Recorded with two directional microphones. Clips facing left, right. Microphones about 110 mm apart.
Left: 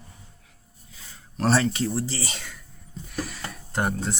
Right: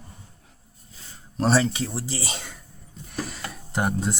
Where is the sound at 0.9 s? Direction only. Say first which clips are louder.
Right 5 dB; 30° right (ahead or behind).